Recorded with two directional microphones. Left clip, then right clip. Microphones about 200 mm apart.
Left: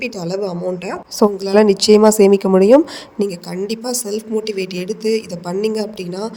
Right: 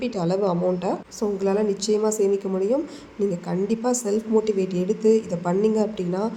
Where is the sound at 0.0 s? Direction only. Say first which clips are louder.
Left 2 dB; 40° left (ahead or behind).